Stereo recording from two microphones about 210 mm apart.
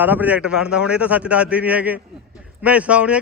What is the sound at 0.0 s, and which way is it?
Speech, 10° right (ahead or behind).